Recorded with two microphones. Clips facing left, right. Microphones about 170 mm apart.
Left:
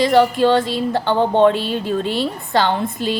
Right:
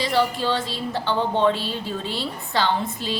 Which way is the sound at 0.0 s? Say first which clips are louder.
Left 8 dB; 55° left (ahead or behind).